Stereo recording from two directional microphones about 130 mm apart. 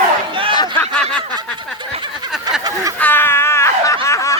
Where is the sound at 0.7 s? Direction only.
5° left (ahead or behind).